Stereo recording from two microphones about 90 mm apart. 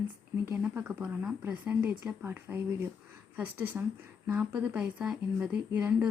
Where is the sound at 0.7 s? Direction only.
25° right (ahead or behind).